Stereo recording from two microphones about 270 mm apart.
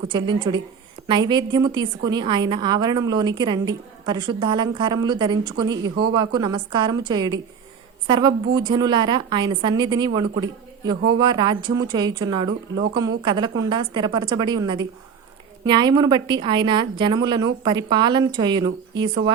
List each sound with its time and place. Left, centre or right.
0.1 s a woman's voice: centre